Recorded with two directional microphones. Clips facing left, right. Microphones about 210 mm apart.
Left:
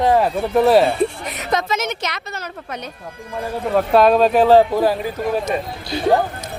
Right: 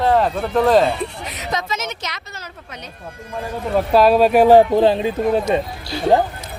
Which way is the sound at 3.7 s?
Centre (ahead or behind).